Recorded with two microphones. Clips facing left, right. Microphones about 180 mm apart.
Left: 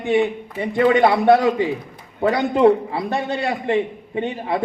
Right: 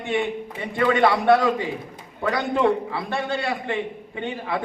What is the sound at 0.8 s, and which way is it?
Speech, 20° left (ahead or behind).